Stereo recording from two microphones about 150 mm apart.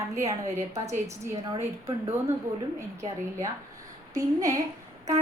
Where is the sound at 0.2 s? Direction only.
20° right (ahead or behind).